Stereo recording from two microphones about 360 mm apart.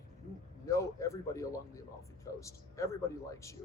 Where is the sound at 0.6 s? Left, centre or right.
Centre.